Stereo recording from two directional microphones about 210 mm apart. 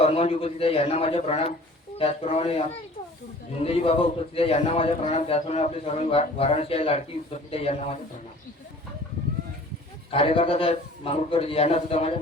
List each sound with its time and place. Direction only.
0.0 s a man's voice: 25° left (ahead or behind)
10.1 s a man's voice: 25° left (ahead or behind)